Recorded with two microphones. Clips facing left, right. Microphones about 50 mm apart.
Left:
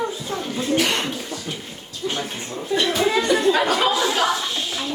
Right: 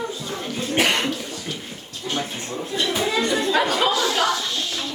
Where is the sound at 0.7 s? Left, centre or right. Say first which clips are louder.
Right 3 dB; right.